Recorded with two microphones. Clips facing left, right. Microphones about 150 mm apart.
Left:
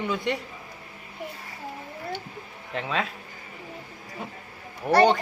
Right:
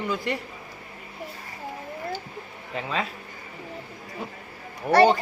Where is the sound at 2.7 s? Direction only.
Centre (ahead or behind).